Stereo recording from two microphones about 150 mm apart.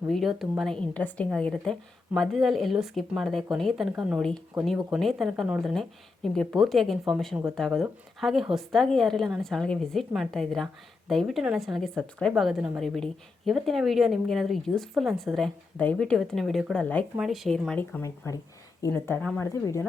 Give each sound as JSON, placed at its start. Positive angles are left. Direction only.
{"t": 0.1, "sound": "a woman's voice", "side_deg": 0}